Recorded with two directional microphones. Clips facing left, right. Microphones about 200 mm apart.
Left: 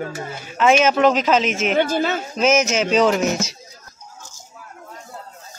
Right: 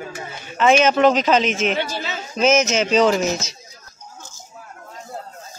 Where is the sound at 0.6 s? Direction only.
5° left (ahead or behind).